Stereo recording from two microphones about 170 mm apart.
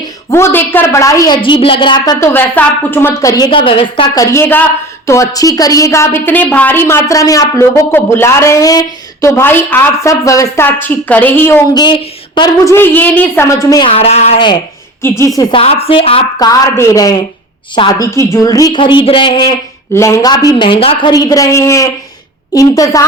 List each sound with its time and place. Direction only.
0.3 s a woman's voice: 15° left (ahead or behind)
2.3 s a woman's voice: 10° left (ahead or behind); by 4.2 s 30° left (ahead or behind)
4.2 s a woman's voice: 15° left (ahead or behind)
11.7 s a woman's voice: 25° left (ahead or behind)
12.7 s a woman's voice: 10° left (ahead or behind)
13.9 s speech: 35° left (ahead or behind)
15.0 s a woman's voice: 15° left (ahead or behind)
15.5 s speech: 35° left (ahead or behind)
16.5 s a woman's voice: 15° left (ahead or behind)
19.9 s a woman's voice: 15° left (ahead or behind)